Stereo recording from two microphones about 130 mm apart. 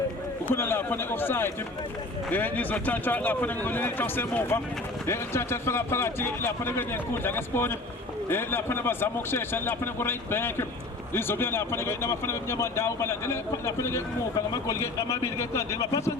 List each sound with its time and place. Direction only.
0.4 s a man's voice: 15° left (ahead or behind)